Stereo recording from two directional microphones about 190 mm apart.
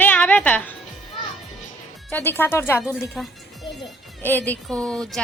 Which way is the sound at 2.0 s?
10° left (ahead or behind).